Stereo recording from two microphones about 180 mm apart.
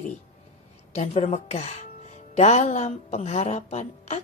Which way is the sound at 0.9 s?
35° left (ahead or behind).